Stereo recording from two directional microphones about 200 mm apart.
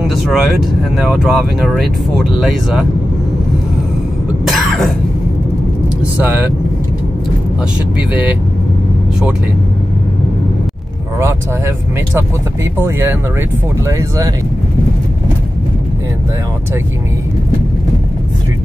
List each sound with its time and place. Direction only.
0.1 s speech: centre (ahead or behind)
4.5 s cough: centre (ahead or behind)
8.1 s speech: 5° right (ahead or behind)
11.1 s speech: 10° right (ahead or behind)
13.8 s speech: 15° right (ahead or behind)